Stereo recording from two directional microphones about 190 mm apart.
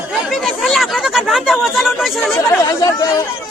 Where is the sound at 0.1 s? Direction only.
Centre (ahead or behind).